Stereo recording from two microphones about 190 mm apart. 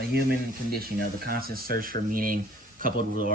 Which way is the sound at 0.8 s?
50° right (ahead or behind).